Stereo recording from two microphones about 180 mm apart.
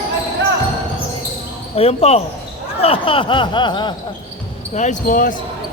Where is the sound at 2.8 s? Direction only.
30° left (ahead or behind).